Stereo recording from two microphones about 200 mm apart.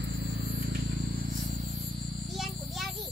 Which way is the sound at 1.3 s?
40° right (ahead or behind).